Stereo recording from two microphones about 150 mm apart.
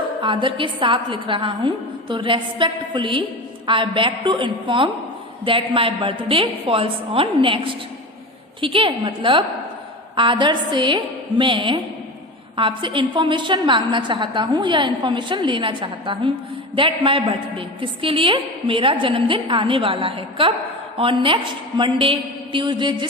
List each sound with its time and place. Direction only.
0.2 s a woman's voice: 35° right (ahead or behind)